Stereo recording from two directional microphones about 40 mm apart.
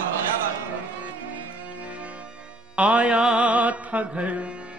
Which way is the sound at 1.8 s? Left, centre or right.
Right.